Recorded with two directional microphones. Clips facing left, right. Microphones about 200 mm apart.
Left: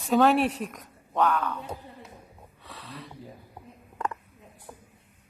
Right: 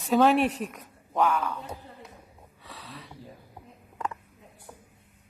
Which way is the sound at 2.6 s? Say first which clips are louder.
Left 2 dB; centre (ahead or behind).